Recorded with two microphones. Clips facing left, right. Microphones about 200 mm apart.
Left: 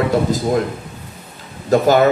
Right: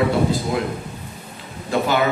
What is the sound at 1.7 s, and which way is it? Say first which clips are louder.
Speech: left 7 dB; 40° left (ahead or behind).